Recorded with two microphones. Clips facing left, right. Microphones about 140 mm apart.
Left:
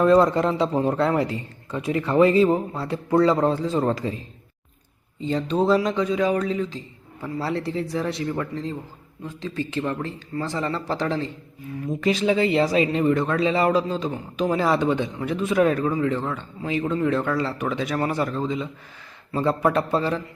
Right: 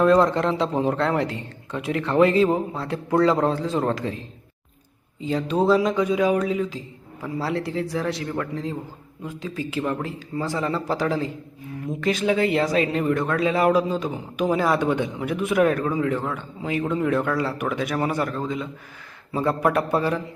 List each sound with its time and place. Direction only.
0.0 s a man's voice: 5° left (ahead or behind)
5.2 s a man's voice: 5° right (ahead or behind)